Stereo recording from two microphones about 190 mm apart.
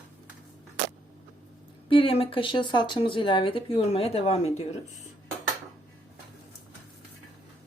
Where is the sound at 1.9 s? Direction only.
30° left (ahead or behind).